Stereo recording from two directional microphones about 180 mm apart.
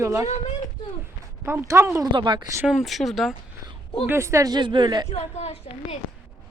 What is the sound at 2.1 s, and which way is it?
Speech, 25° right (ahead or behind).